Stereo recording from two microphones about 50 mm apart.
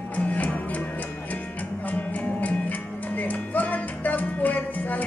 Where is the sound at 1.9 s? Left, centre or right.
Left.